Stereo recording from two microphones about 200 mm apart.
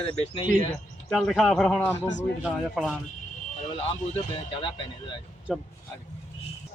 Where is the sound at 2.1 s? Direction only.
60° left (ahead or behind).